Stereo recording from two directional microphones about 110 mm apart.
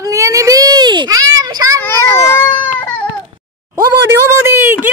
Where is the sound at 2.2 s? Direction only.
20° left (ahead or behind).